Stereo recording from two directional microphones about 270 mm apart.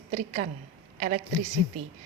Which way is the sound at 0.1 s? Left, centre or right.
Right.